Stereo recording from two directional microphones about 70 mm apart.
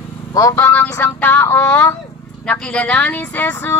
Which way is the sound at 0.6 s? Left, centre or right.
Left.